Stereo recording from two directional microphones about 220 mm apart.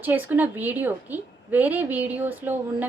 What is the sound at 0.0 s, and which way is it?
A woman's voice, 10° right (ahead or behind).